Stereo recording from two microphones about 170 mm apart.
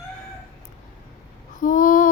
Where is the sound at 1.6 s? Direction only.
50° left (ahead or behind).